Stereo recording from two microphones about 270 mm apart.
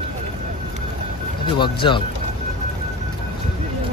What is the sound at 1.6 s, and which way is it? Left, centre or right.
Speech, centre.